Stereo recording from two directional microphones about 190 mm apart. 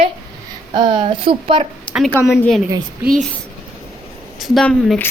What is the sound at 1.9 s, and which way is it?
Speech, 5° right (ahead or behind).